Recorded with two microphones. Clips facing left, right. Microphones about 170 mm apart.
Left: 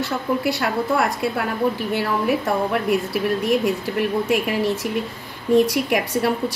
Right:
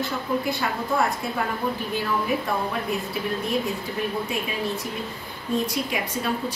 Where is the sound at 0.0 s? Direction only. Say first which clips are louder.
Left 4 dB; 80° left.